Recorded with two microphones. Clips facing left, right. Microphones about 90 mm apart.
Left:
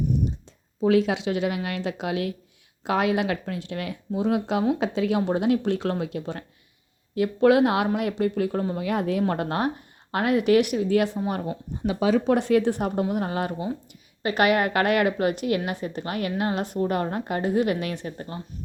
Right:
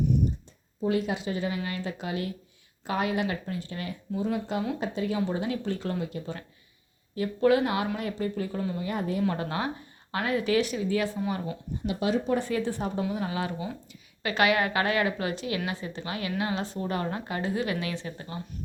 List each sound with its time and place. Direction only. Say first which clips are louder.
0.8 s speech: left 7 dB; 90° left; by 6.4 s 70° left (ahead or behind)
7.4 s speech: left 5 dB; 80° left
8.7 s speech: left 5 dB; 85° left
9.2 s a woman's voice: left 4 dB; 55° left (ahead or behind)
12.2 s speech: left 7 dB; 75° left (ahead or behind)
13.0 s a woman's voice: left 4 dB; 50° left (ahead or behind)